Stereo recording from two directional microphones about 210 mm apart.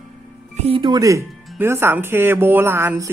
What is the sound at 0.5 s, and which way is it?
Speech, 30° right (ahead or behind).